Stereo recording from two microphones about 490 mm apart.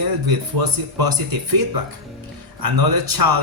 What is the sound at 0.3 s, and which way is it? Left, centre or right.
Speech, right.